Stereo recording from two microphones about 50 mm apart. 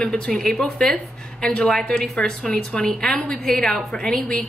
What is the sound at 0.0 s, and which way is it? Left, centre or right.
Speech, centre.